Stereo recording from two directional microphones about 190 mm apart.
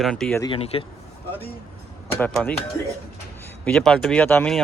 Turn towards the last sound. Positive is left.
turn(degrees=5)  # may be behind; listen again after turning